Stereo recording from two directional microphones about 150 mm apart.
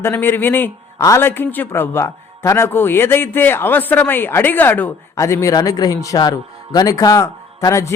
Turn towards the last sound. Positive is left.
turn(degrees=20)  # may be behind; listen again after turning